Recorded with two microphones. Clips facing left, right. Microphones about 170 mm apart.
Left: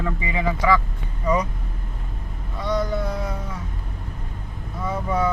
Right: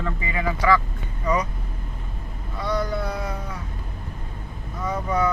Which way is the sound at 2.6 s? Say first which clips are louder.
Left 2 dB; 20° left (ahead or behind).